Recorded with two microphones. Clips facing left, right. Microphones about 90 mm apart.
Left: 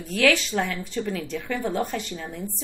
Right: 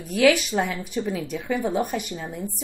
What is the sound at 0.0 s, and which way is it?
A woman's voice, 15° right (ahead or behind).